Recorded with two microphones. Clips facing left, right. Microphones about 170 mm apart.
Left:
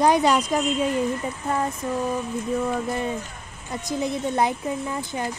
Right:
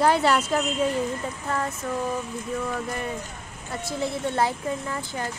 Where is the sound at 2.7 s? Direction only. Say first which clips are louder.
Left 4 dB; 20° left (ahead or behind).